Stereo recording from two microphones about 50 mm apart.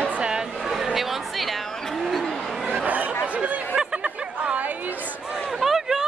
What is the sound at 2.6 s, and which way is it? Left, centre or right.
Chatter, right.